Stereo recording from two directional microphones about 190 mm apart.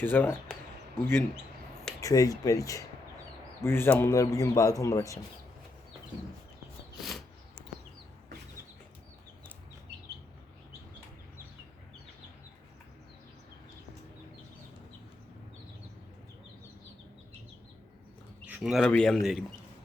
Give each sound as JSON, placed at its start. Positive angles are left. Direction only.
{"t": 0.0, "sound": "speech", "side_deg": 10}
{"t": 2.0, "sound": "speech", "side_deg": 15}
{"t": 6.9, "sound": "a sound", "side_deg": 0}
{"t": 18.4, "sound": "speech", "side_deg": -5}